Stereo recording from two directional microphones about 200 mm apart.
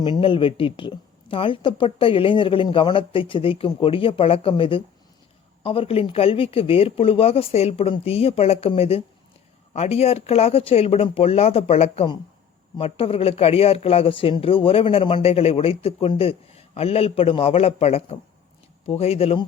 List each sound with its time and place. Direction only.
0.0 s speech: 25° left (ahead or behind)